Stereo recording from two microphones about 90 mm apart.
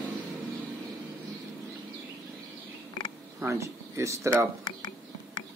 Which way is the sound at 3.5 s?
35° right (ahead or behind).